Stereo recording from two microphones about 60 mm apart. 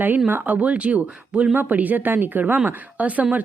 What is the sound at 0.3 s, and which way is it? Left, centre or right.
Speech, right.